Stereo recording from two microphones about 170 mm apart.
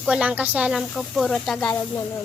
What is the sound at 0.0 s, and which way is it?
A child's voice, 5° right (ahead or behind).